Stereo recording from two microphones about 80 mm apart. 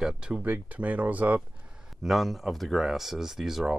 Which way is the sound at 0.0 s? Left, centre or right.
Centre.